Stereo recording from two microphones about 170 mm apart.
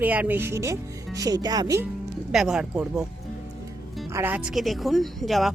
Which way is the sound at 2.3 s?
5° right (ahead or behind).